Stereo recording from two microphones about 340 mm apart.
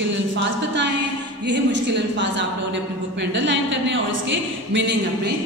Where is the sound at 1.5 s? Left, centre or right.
Right.